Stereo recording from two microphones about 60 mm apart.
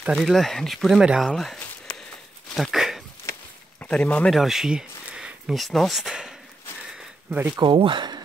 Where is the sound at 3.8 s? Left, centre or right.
Centre.